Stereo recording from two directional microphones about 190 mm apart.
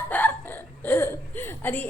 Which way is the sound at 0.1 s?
10° left (ahead or behind).